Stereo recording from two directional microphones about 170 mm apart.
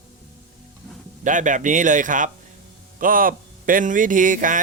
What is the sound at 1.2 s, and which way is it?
Speech, 50° right (ahead or behind).